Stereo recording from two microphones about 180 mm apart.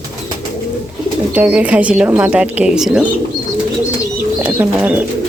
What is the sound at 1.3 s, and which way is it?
Speech, 10° right (ahead or behind).